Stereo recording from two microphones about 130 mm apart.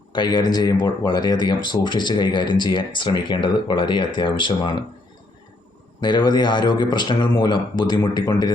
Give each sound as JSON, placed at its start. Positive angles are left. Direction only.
{"t": 0.1, "sound": "speech", "side_deg": 35}
{"t": 6.0, "sound": "speech", "side_deg": 35}